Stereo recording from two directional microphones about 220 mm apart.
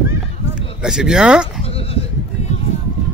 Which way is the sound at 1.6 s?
25° left (ahead or behind).